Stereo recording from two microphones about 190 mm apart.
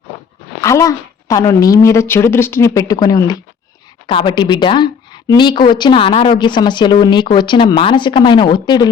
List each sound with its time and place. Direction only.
0.6 s a woman's voice: 15° left (ahead or behind)